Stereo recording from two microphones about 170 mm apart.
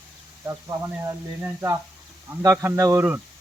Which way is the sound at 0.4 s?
20° right (ahead or behind).